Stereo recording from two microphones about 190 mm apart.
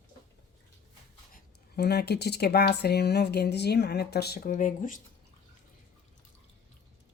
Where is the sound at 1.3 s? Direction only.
55° left (ahead or behind).